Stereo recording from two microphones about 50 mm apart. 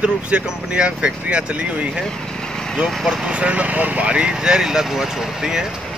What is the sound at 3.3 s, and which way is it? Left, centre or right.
Speech, right.